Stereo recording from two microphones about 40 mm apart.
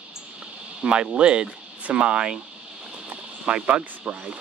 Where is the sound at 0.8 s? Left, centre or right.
Right.